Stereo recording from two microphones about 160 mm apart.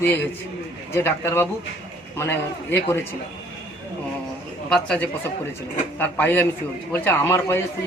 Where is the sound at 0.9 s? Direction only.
15° left (ahead or behind).